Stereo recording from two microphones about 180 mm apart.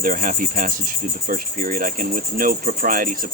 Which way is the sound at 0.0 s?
50° right (ahead or behind).